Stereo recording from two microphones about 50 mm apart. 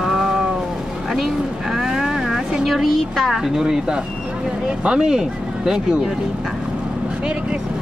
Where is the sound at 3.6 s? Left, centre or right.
Centre.